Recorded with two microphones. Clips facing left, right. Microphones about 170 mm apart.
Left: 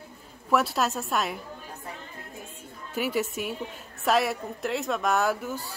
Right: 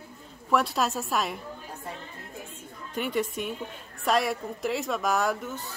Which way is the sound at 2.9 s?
5° left (ahead or behind).